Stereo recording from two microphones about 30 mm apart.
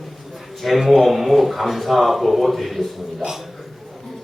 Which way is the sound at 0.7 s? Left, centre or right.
Centre.